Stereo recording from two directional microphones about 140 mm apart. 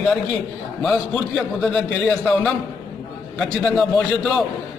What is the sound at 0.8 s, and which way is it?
A man's voice, 5° left (ahead or behind).